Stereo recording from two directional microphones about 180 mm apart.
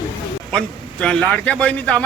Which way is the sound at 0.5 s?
5° left (ahead or behind).